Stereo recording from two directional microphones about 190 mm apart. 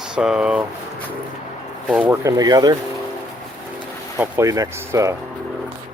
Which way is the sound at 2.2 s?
20° right (ahead or behind).